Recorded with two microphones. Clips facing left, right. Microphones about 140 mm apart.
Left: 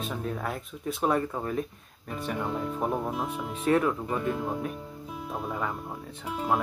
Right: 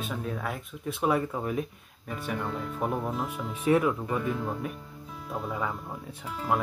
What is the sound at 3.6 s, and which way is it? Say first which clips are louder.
Speech: right 1 dB; 10° right (ahead or behind).